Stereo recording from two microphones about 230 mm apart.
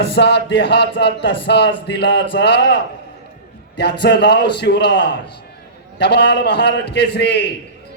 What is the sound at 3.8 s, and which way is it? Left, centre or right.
A man's voice, left.